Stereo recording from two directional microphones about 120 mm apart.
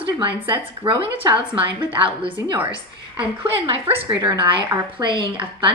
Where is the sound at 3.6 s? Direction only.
50° right (ahead or behind).